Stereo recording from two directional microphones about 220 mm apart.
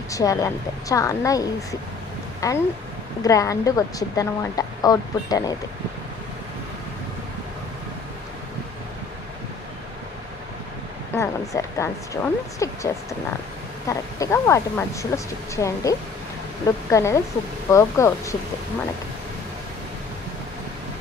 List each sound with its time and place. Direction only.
0.1 s a woman's voice: 15° left (ahead or behind)
11.1 s a woman's voice: 15° left (ahead or behind)